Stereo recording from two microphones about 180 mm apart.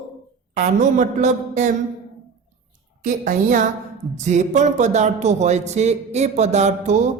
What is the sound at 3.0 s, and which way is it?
A woman's voice, 45° right (ahead or behind).